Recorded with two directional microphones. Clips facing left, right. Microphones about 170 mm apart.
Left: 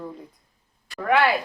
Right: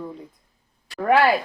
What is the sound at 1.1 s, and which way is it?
Speech, 40° right (ahead or behind).